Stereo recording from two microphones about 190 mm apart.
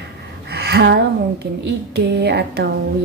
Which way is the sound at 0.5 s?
60° right (ahead or behind).